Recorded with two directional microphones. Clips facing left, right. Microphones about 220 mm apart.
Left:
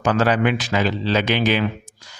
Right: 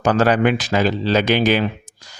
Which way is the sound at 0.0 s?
40° right (ahead or behind).